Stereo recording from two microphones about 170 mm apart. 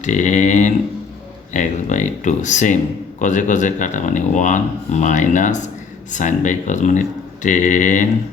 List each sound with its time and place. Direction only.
0.0 s speech: 45° left (ahead or behind)